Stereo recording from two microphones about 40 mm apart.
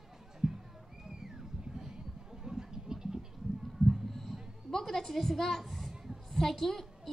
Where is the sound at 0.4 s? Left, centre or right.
Centre.